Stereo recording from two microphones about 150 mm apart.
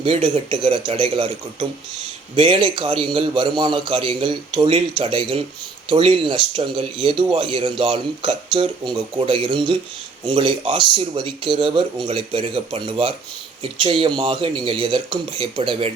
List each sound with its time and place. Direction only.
0.0 s speech: 40° right (ahead or behind)